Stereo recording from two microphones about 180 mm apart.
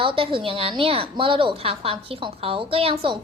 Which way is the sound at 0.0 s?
30° right (ahead or behind).